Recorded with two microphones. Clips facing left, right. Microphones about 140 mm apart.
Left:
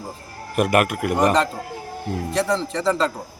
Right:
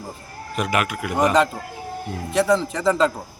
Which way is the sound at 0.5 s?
55° left (ahead or behind).